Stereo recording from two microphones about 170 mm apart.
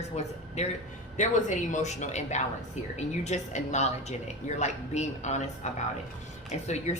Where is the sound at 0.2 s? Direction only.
40° left (ahead or behind).